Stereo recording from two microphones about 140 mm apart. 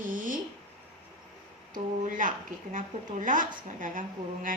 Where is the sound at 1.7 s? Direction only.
70° right (ahead or behind).